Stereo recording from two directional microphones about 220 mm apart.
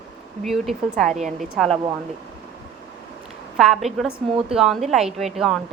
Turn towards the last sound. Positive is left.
turn(degrees=0)  # may be behind; listen again after turning